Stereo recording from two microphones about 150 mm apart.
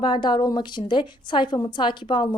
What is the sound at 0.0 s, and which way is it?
A woman's voice, 30° left (ahead or behind).